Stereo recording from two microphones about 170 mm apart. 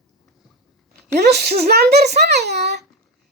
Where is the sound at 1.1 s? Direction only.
75° right (ahead or behind).